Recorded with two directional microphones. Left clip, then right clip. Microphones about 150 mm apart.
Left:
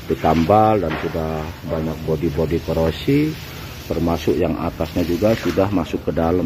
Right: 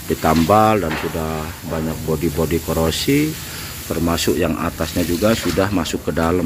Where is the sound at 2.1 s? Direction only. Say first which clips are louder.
Even; 20° right (ahead or behind).